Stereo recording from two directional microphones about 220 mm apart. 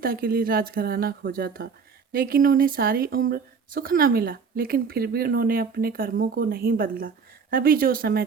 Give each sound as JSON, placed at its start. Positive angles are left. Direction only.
{"t": 0.0, "sound": "speech", "side_deg": -40}